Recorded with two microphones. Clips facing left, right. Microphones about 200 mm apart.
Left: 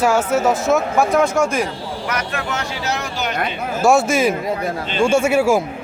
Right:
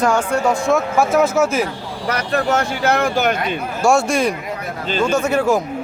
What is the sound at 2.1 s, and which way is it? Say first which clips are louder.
Speech: right 8 dB; 40° right (ahead or behind).